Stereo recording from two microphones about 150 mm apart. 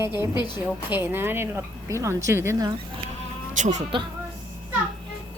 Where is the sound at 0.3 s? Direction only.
30° left (ahead or behind).